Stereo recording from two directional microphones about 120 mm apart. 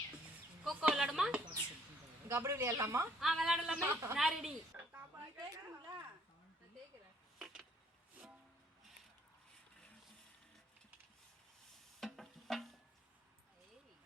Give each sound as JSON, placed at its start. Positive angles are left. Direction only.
{"t": 0.6, "sound": "speech", "side_deg": -5}
{"t": 2.3, "sound": "speech", "side_deg": -25}
{"t": 3.2, "sound": "a woman's voice", "side_deg": -5}
{"t": 3.8, "sound": "a woman's voice", "side_deg": -20}
{"t": 4.2, "sound": "a woman's voice", "side_deg": 0}
{"t": 4.8, "sound": "a sound", "side_deg": -20}
{"t": 5.5, "sound": "a sound", "side_deg": -30}
{"t": 7.3, "sound": "a sound", "side_deg": -5}
{"t": 11.9, "sound": "music", "side_deg": 0}